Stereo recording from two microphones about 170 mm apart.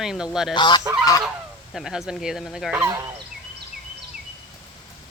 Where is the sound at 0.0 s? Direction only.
5° right (ahead or behind).